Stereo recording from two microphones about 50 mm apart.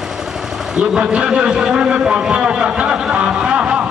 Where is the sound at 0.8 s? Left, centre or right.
Centre.